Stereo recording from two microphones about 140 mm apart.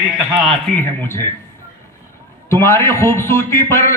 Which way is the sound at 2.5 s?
20° left (ahead or behind).